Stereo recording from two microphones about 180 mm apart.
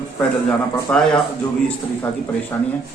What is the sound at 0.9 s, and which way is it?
Speech, 5° left (ahead or behind).